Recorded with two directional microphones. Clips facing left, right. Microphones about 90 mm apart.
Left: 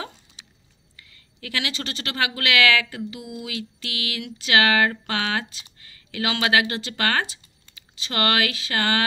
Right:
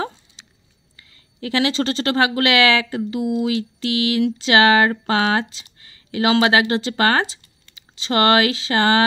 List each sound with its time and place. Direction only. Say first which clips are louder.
0.9 s speech: right 3 dB; 30° right (ahead or behind)